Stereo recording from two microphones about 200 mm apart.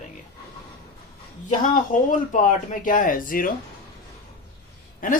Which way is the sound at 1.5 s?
40° left (ahead or behind).